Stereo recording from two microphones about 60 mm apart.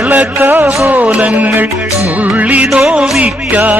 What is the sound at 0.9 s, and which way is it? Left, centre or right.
Music, right.